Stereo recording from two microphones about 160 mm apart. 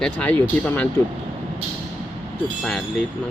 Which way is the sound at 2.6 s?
Centre (ahead or behind).